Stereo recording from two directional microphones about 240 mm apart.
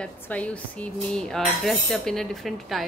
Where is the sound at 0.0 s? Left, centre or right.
Centre.